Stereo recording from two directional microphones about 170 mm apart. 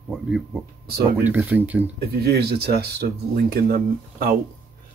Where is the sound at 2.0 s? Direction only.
70° right (ahead or behind).